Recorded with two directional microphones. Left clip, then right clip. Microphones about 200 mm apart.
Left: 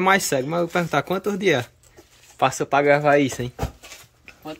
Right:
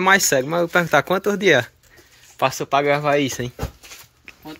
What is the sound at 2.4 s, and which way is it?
Speech, 20° left (ahead or behind).